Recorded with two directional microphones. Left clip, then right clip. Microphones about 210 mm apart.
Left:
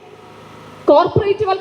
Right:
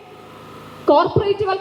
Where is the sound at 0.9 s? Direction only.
25° left (ahead or behind).